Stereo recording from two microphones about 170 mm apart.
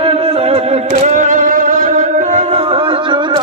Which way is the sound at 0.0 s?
35° right (ahead or behind).